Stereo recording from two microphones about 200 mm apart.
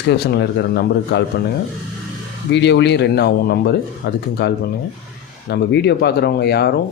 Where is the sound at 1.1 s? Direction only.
60° left (ahead or behind).